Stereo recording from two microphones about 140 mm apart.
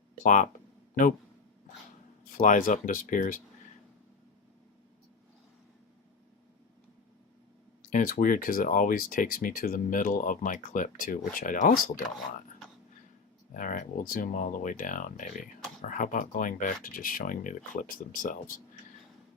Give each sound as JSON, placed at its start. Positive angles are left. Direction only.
{"t": 0.2, "sound": "speech", "side_deg": 65}
{"t": 2.4, "sound": "speech", "side_deg": 70}
{"t": 7.8, "sound": "speech", "side_deg": 70}
{"t": 13.5, "sound": "speech", "side_deg": 70}